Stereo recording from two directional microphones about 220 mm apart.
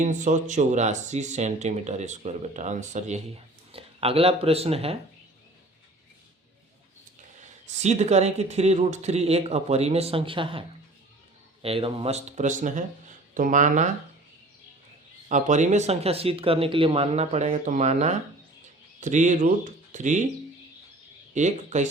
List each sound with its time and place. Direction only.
0.0 s speech: 35° right (ahead or behind)
7.7 s speech: 30° right (ahead or behind)
15.3 s speech: 35° right (ahead or behind)
21.3 s speech: 35° right (ahead or behind)